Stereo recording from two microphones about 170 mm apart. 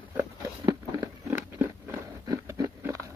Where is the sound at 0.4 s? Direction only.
20° right (ahead or behind).